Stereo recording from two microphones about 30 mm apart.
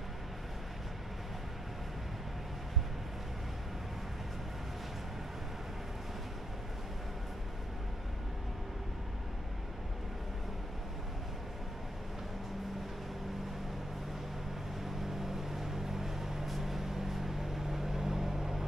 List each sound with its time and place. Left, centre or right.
15.0 s vehicle: centre